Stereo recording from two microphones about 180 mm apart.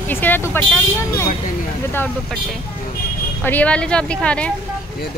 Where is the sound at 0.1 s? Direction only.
10° left (ahead or behind).